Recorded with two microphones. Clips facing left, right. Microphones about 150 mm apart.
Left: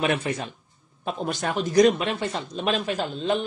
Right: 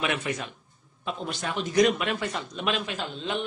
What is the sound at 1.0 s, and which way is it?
Speech, 45° left (ahead or behind).